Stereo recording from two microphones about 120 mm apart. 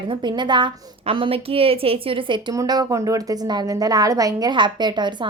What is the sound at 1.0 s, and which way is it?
A woman's voice, 50° right (ahead or behind).